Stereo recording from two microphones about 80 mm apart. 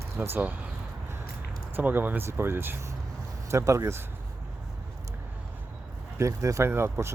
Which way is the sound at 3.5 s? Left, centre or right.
Right.